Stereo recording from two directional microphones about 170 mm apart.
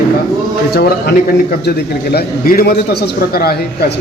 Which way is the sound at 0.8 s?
65° left (ahead or behind).